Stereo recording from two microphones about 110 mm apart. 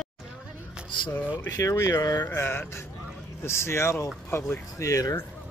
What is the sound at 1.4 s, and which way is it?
Speech, 35° left (ahead or behind).